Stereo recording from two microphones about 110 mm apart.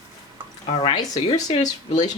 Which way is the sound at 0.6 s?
50° left (ahead or behind).